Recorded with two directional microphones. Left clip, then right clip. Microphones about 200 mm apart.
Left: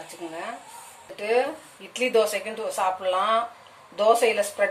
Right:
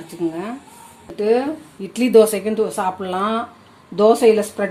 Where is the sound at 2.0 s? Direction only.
50° right (ahead or behind).